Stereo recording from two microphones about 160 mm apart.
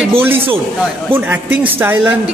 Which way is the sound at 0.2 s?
15° right (ahead or behind).